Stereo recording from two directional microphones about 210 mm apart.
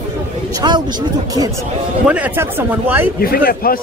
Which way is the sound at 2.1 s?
10° right (ahead or behind).